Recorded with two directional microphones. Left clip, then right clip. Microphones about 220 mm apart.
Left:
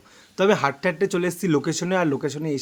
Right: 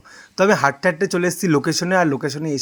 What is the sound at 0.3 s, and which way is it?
Speech, 15° right (ahead or behind).